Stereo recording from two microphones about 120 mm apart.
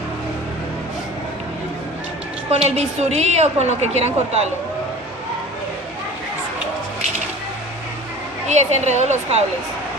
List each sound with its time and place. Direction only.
2.6 s a woman's voice: 65° right (ahead or behind)
8.4 s a woman's voice: 70° right (ahead or behind)